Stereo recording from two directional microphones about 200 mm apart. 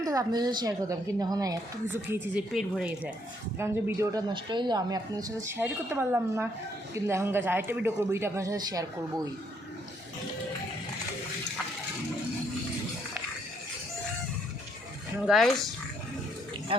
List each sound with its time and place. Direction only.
0.0 s a woman's voice: 15° right (ahead or behind)
15.3 s speech: centre (ahead or behind)